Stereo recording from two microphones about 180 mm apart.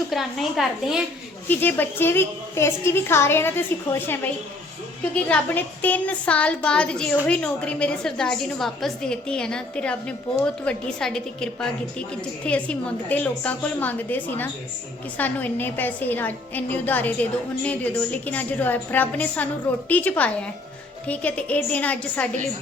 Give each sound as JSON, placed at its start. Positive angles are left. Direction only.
{"t": 0.1, "sound": "a woman's voice", "side_deg": 0}
{"t": 1.5, "sound": "a woman's voice", "side_deg": 10}